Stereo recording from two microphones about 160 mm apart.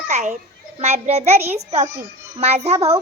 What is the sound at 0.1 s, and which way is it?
A child's voice, 50° right (ahead or behind).